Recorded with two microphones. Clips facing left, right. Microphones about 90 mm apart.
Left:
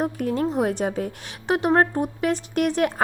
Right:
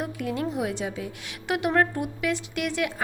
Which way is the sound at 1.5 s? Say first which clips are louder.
Left 4 dB; 35° left (ahead or behind).